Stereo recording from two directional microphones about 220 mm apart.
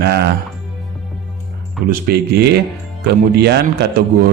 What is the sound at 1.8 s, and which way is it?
A man's voice, 45° right (ahead or behind).